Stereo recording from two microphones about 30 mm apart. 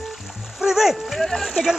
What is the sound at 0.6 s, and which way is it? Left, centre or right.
Speech, centre.